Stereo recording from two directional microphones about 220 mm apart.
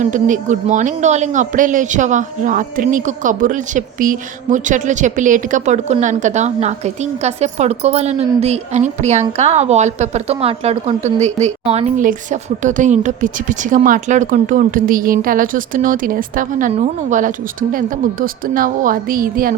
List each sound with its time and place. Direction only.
0.0 s a woman's voice: 35° right (ahead or behind)